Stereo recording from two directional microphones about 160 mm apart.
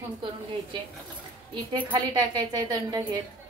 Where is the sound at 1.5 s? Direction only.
30° right (ahead or behind).